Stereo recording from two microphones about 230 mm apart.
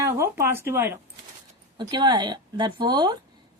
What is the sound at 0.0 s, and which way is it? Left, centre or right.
Speech, centre.